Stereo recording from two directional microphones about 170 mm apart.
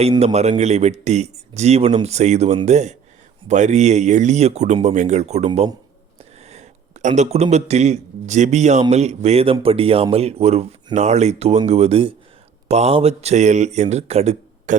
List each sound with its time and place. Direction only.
0.3 s a man's voice: 40° right (ahead or behind)
6.4 s a sound: 40° right (ahead or behind)
7.2 s a man's voice: 40° right (ahead or behind)